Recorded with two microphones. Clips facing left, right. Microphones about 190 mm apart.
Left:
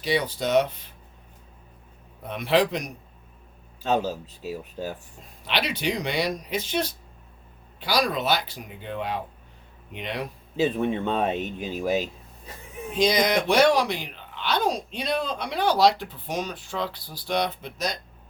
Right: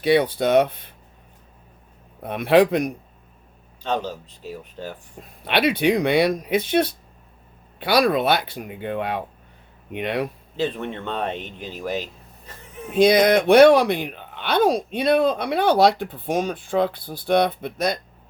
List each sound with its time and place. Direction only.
0.0 s speech: 60° right (ahead or behind)
2.2 s speech: 55° right (ahead or behind)
3.8 s speech: 5° left (ahead or behind)
5.5 s speech: 55° right (ahead or behind)
10.6 s speech: 10° left (ahead or behind)
13.0 s speech: 55° right (ahead or behind)